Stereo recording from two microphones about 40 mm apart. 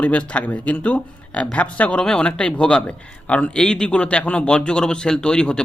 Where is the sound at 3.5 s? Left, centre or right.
Centre.